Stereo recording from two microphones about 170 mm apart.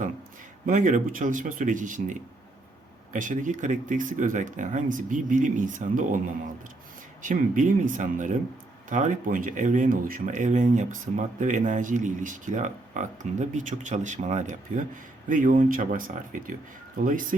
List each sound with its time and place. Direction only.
0.6 s speech: 50° right (ahead or behind)
7.2 s speech: 50° right (ahead or behind)